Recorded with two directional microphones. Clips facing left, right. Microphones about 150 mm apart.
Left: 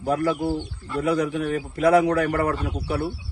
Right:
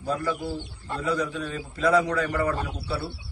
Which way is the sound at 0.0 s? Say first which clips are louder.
Left 6 dB; 55° left (ahead or behind).